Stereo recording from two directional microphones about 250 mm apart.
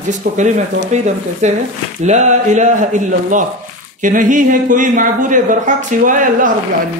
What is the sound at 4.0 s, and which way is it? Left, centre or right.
Speech, right.